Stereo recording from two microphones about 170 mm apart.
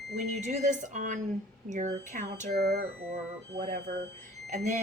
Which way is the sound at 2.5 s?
70° right (ahead or behind).